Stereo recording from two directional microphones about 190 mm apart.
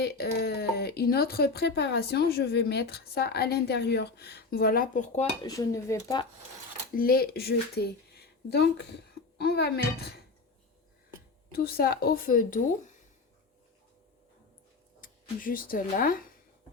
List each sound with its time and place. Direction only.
0.0 s speech: 55° left (ahead or behind); by 5.2 s 40° left (ahead or behind)
5.4 s speech: 20° left (ahead or behind)
6.9 s speech: 50° left (ahead or behind)
11.5 s a woman's voice: 55° left (ahead or behind)
15.0 s speech: 45° left (ahead or behind)